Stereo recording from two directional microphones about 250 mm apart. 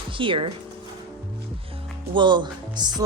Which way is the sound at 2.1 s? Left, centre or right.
Centre.